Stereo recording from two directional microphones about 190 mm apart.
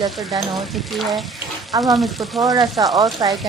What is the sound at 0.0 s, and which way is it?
Speech, centre (ahead or behind).